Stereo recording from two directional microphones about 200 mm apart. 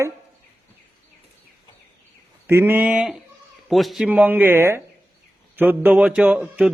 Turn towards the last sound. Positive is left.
turn(degrees=-5)  # may be behind; listen again after turning